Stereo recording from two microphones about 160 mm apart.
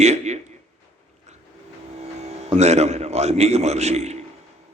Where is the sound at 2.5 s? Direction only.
45° right (ahead or behind).